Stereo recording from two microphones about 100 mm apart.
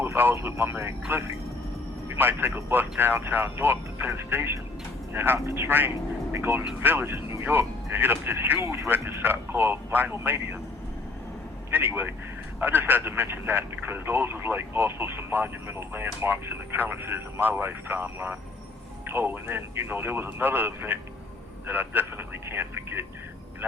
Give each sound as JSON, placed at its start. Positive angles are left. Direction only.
{"t": 0.0, "sound": "speech", "side_deg": -20}
{"t": 2.1, "sound": "speech", "side_deg": -20}
{"t": 11.7, "sound": "speech", "side_deg": -20}